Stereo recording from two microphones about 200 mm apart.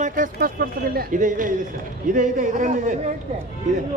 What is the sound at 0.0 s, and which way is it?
Speech, 40° right (ahead or behind).